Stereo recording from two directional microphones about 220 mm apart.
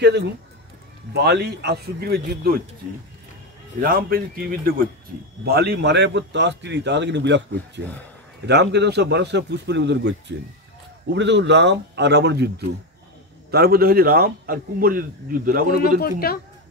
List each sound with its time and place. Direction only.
1.1 s a man's voice: 50° right (ahead or behind)
3.8 s a man's voice: 40° right (ahead or behind)
16.0 s speech: 45° left (ahead or behind)